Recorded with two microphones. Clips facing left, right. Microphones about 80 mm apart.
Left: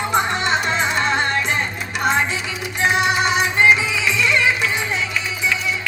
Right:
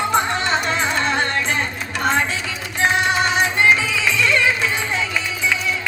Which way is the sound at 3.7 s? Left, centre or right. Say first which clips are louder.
Even; centre.